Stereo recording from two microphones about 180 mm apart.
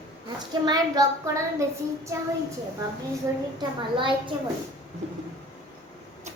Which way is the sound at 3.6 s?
25° right (ahead or behind).